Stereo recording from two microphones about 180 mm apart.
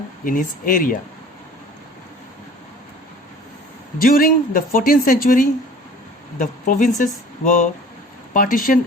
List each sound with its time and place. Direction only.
0.3 s speech: 50° left (ahead or behind)
3.9 s speech: 50° left (ahead or behind)